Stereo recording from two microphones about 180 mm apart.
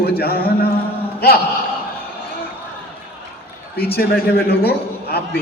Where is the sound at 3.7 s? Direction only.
60° left (ahead or behind).